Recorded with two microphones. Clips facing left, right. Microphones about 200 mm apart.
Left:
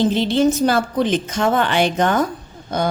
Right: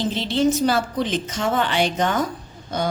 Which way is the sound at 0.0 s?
50° left (ahead or behind).